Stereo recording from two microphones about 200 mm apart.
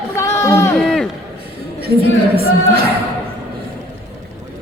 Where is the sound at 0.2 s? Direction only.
15° left (ahead or behind).